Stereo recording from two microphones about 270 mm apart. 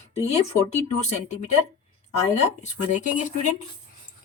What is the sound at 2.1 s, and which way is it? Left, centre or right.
A woman's voice, left.